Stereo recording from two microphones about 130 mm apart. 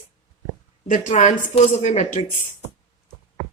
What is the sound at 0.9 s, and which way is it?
A woman's voice, 75° left (ahead or behind).